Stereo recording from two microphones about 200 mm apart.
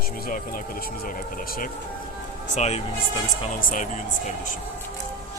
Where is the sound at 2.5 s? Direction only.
35° left (ahead or behind).